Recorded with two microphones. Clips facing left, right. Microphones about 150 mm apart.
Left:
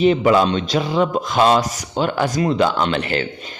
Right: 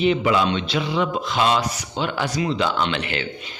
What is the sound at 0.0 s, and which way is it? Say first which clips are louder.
Speech: left 5 dB; 40° left (ahead or behind).